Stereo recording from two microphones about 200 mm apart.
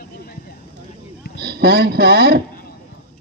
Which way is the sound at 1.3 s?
50° right (ahead or behind).